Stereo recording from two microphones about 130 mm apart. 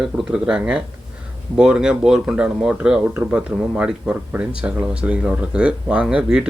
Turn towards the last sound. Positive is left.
turn(degrees=-10)  # may be behind; listen again after turning